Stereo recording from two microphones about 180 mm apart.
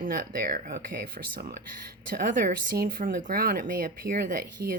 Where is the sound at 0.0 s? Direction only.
50° right (ahead or behind).